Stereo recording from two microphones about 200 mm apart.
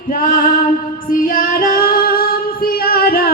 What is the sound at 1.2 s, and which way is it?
Female singing, 45° left (ahead or behind).